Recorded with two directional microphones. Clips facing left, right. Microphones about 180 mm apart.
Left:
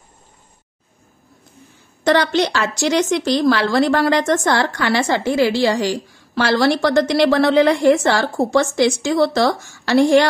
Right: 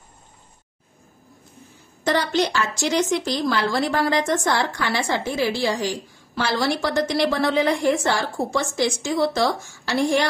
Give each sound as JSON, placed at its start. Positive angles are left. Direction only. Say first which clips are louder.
{"t": 2.0, "sound": "a woman's voice", "louder": "left 5 dB", "side_deg": 75}